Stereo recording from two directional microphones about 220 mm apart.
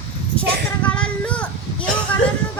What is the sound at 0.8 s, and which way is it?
Child singing, 5° left (ahead or behind).